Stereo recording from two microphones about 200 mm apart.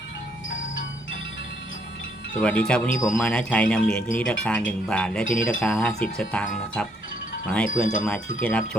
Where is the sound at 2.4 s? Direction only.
5° left (ahead or behind).